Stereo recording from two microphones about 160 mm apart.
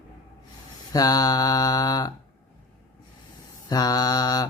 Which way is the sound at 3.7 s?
25° left (ahead or behind).